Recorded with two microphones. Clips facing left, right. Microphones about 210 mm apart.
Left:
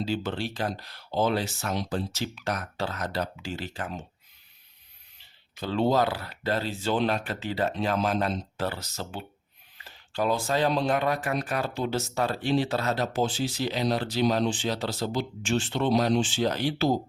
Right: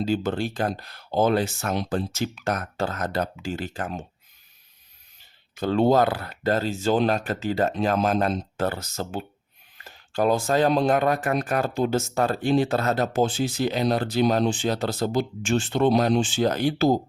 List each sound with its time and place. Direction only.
0.0 s speech: 45° right (ahead or behind)
5.1 s speech: 50° right (ahead or behind)